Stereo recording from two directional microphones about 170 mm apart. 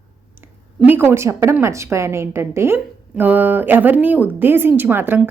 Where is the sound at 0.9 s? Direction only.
15° right (ahead or behind).